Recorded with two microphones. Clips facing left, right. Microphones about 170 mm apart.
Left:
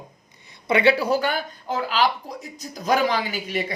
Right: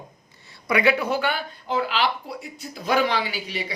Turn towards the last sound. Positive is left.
turn(degrees=50)  # may be behind; listen again after turning